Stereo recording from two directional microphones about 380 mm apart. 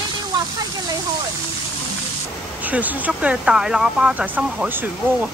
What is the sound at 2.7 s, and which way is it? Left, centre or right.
Speech, centre.